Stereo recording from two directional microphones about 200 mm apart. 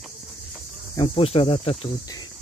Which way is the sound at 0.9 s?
25° left (ahead or behind).